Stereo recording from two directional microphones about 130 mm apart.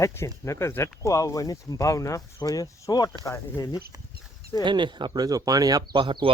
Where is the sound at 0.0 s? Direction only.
20° left (ahead or behind).